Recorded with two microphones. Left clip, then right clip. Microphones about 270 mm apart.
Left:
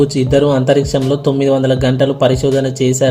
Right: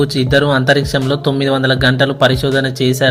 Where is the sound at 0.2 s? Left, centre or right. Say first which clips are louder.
Left 1 dB; centre.